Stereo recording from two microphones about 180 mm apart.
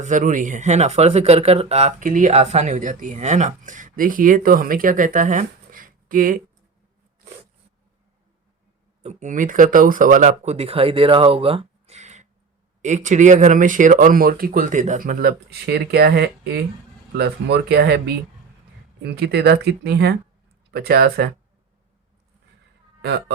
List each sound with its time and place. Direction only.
0.0 s speech: 45° right (ahead or behind)
9.0 s speech: 45° right (ahead or behind); by 18.0 s 65° right (ahead or behind)
19.0 s speech: 65° right (ahead or behind)
23.0 s a woman's voice: 70° right (ahead or behind)